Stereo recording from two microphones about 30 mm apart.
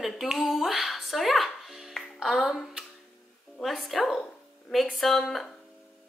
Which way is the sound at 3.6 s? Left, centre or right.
Centre.